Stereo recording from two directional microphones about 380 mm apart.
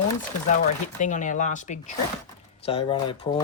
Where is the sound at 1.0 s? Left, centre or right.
Centre.